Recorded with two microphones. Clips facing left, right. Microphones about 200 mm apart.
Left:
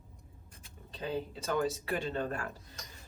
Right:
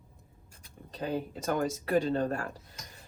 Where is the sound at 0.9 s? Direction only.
45° right (ahead or behind).